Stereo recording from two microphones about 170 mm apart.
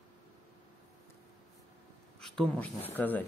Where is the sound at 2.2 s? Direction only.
5° left (ahead or behind).